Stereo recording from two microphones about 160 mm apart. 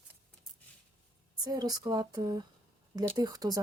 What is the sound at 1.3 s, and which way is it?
Speech, 25° right (ahead or behind).